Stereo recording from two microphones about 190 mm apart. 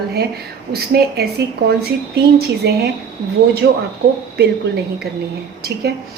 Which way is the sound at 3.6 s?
80° right.